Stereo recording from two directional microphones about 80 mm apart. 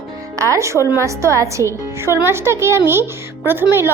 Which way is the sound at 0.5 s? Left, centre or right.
Right.